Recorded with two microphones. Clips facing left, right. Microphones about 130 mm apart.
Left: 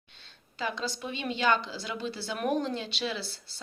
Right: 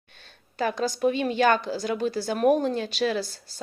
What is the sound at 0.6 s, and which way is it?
A woman's voice, 45° right (ahead or behind).